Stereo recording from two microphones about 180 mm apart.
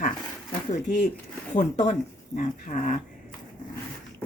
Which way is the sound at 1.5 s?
40° left (ahead or behind).